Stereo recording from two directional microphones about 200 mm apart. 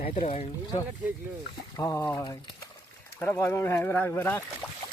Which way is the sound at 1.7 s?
15° left (ahead or behind).